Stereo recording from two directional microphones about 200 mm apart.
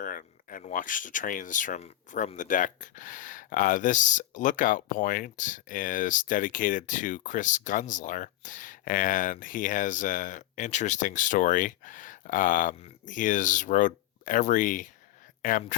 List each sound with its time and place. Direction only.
0.0 s speech: 45° left (ahead or behind)